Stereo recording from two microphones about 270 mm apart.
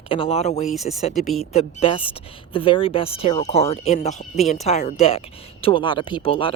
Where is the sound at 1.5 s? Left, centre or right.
Centre.